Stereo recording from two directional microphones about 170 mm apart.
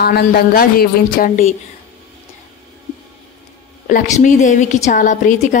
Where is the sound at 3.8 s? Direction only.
50° left (ahead or behind).